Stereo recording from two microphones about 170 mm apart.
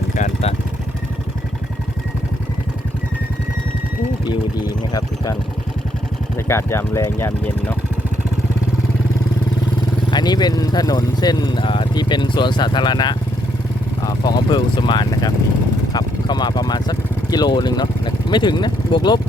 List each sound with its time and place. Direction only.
4.9 s speech: 20° left (ahead or behind)
6.5 s speech: 15° left (ahead or behind)
10.1 s speech: 25° left (ahead or behind)